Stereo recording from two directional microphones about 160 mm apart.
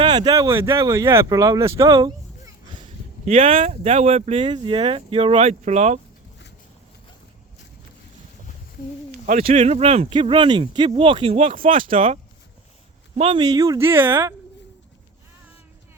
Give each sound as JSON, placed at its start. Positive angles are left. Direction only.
{"t": 0.0, "sound": "speech", "side_deg": -25}
{"t": 3.2, "sound": "speech", "side_deg": -40}
{"t": 9.4, "sound": "speech", "side_deg": -40}
{"t": 13.4, "sound": "speech", "side_deg": -20}